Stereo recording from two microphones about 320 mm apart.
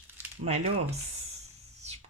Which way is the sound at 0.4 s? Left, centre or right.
Centre.